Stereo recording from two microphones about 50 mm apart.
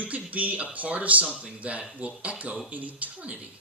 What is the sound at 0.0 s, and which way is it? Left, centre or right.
Speech, right.